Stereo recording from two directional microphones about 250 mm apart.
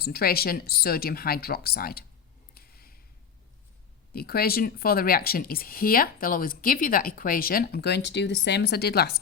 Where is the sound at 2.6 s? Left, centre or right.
Left.